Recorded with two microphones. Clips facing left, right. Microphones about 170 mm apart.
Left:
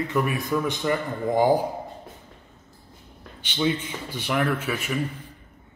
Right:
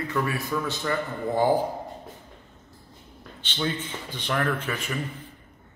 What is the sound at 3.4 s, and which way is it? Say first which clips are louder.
A man's voice: left 5 dB; 10° left (ahead or behind).